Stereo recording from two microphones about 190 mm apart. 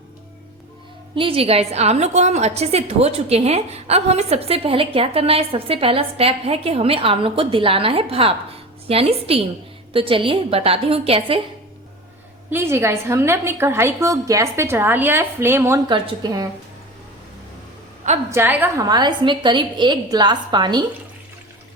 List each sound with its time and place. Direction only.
1.1 s a woman's voice: 30° right (ahead or behind)
12.5 s a woman's voice: 10° right (ahead or behind)
15.9 s a woman's voice: 25° right (ahead or behind)
18.3 s a woman's voice: 10° right (ahead or behind)
18.9 s a woman's voice: 20° right (ahead or behind)